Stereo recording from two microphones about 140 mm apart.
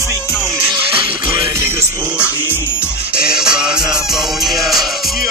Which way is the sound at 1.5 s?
20° right (ahead or behind).